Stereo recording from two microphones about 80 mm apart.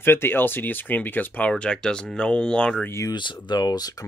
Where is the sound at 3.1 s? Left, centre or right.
Left.